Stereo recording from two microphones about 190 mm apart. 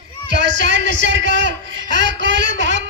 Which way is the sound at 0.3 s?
70° right (ahead or behind).